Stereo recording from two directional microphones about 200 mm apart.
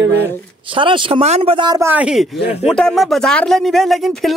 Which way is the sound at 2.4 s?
30° left (ahead or behind).